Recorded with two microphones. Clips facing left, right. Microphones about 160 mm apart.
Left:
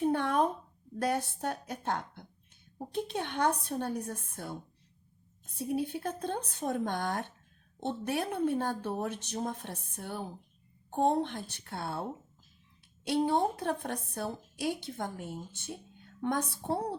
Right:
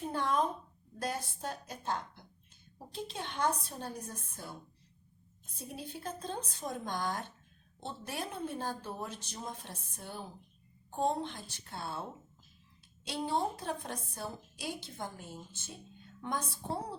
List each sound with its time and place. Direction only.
0.1 s a sound: 60° left (ahead or behind)
0.9 s a woman's voice: 65° left (ahead or behind)
5.5 s a woman's voice: 60° left (ahead or behind)
13.1 s a woman's voice: 60° left (ahead or behind)